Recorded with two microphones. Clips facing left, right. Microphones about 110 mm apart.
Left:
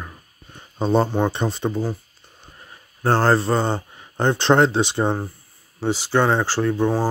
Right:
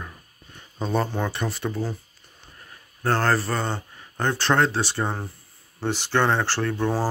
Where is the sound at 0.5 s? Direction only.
30° left (ahead or behind).